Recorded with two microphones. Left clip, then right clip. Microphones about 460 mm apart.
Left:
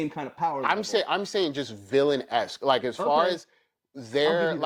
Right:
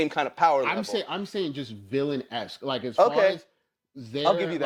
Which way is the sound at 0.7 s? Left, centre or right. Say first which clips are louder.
Left 4 dB; left.